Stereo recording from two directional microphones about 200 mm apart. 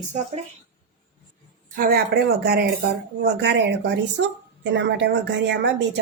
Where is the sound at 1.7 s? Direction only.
45° right (ahead or behind); by 6.0 s 60° right (ahead or behind).